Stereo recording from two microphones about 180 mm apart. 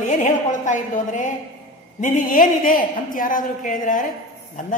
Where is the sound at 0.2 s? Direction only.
45° left (ahead or behind).